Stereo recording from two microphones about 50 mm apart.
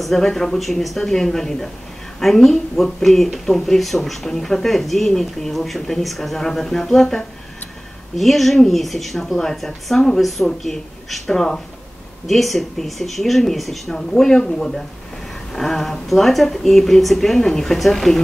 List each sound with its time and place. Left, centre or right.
0.0 s speech: centre